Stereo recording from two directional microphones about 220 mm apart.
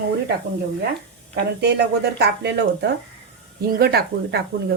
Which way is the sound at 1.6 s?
50° right (ahead or behind).